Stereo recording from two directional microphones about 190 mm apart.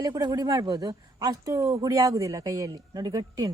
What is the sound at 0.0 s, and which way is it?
A man's voice, 20° right (ahead or behind).